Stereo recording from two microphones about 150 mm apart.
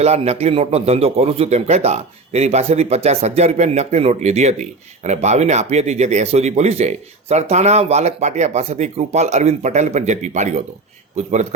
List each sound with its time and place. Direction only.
0.0 s speech: 45° right (ahead or behind)